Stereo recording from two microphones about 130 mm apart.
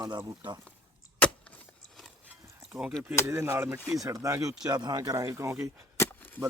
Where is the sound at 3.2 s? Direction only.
20° right (ahead or behind).